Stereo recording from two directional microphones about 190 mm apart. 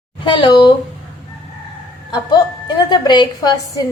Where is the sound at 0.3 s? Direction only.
25° left (ahead or behind).